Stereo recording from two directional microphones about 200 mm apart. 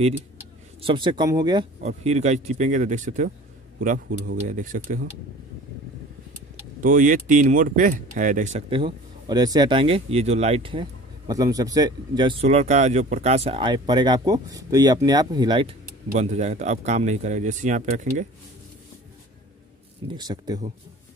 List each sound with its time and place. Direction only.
0.7 s speech: 25° right (ahead or behind)
1.8 s speech: 35° right (ahead or behind)
6.8 s speech: 40° right (ahead or behind); by 15.7 s 20° right (ahead or behind)
16.1 s speech: 35° right (ahead or behind)
20.2 s speech: 20° right (ahead or behind)